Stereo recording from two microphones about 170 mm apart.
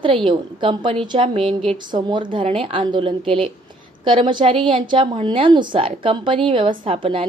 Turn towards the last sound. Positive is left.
turn(degrees=-35)  # may be behind; listen again after turning